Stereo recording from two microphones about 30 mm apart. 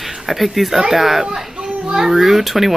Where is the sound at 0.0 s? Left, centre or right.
Centre.